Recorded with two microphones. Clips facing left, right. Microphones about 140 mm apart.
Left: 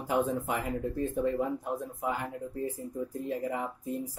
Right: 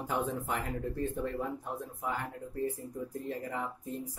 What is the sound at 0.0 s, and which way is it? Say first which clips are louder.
Speech: left 5 dB; 10° left (ahead or behind).